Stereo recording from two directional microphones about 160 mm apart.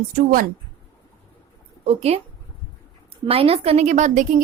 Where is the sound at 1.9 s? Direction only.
40° right (ahead or behind).